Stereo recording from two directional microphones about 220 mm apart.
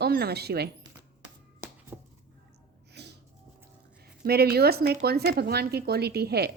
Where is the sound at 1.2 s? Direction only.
5° right (ahead or behind).